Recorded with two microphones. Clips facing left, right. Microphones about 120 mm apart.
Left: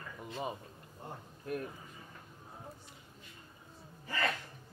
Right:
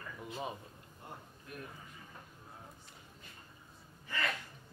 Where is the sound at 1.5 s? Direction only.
50° left (ahead or behind).